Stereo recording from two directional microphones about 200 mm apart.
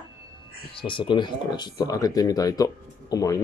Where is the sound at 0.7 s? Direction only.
25° left (ahead or behind).